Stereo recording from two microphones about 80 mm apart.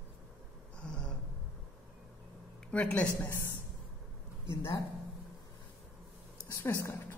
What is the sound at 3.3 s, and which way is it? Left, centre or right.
Speech, left.